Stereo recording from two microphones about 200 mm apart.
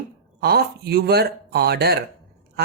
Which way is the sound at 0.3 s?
50° right (ahead or behind).